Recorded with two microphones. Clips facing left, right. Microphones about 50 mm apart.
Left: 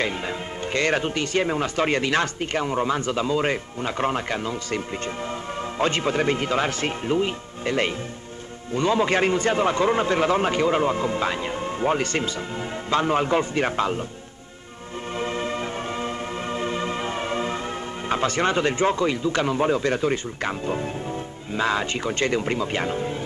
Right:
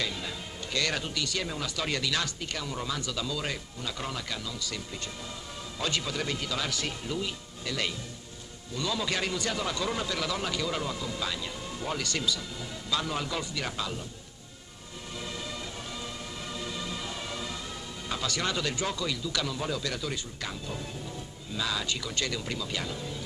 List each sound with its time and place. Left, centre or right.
0.0 s a man's voice: left
15.1 s music: left
18.0 s a man's voice: left